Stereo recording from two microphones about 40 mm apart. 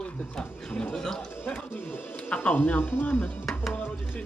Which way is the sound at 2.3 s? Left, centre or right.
Left.